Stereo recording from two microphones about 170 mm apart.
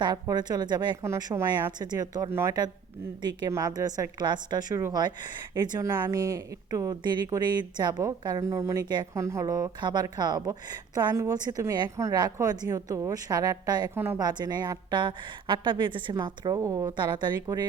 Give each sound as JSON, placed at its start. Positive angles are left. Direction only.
{"t": 0.0, "sound": "speech", "side_deg": -25}